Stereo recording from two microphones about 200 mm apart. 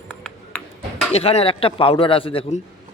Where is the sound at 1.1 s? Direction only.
30° left (ahead or behind).